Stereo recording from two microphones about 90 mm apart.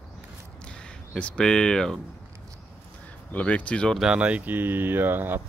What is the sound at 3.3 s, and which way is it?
Speech, 15° left (ahead or behind).